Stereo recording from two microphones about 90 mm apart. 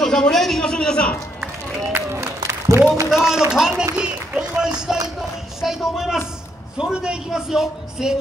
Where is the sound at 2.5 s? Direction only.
30° right (ahead or behind).